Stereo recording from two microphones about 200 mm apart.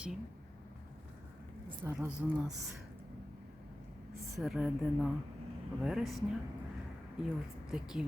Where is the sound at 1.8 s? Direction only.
10° right (ahead or behind).